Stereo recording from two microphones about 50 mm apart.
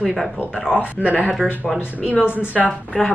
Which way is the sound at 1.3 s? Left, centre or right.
Centre.